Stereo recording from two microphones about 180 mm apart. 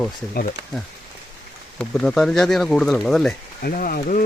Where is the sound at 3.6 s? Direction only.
50° left (ahead or behind).